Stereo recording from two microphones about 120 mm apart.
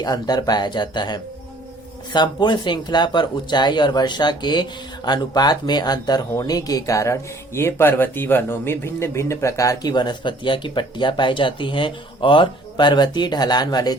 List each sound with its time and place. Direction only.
0.0 s speech: 35° left (ahead or behind)